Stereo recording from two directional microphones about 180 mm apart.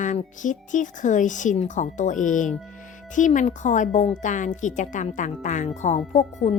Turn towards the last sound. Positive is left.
turn(degrees=40)  # may be behind; listen again after turning